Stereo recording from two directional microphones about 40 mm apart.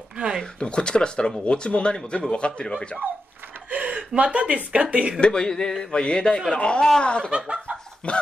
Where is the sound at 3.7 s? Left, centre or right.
Right.